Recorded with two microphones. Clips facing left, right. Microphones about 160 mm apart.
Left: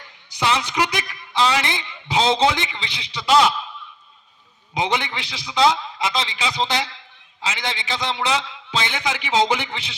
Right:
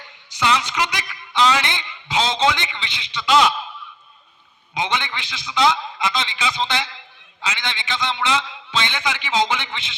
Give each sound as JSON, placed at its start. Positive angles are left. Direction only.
{"t": 0.3, "sound": "a man's voice", "side_deg": 35}
{"t": 4.8, "sound": "a man's voice", "side_deg": 35}